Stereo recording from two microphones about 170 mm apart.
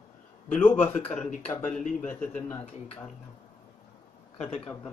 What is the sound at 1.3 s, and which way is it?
Speech, 45° left (ahead or behind).